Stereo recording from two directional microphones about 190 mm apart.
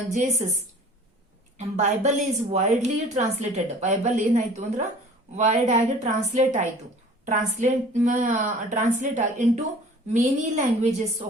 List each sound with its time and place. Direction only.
0.1 s a woman's voice: 40° right (ahead or behind)
1.5 s a woman's voice: 35° right (ahead or behind)